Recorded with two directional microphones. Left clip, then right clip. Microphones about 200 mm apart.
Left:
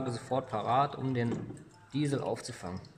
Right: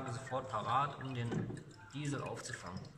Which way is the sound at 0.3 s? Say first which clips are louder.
Left 5 dB; 45° left (ahead or behind).